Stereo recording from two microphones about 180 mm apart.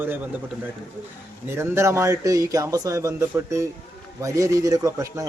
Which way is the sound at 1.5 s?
15° right (ahead or behind).